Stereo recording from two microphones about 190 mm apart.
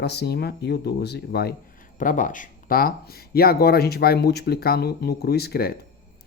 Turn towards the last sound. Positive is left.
turn(degrees=55)  # may be behind; listen again after turning